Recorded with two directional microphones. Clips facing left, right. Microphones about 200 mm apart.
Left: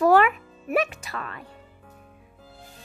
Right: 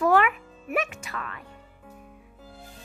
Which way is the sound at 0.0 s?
35° left (ahead or behind).